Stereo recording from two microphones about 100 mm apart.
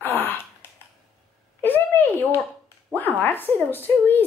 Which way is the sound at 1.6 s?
20° left (ahead or behind).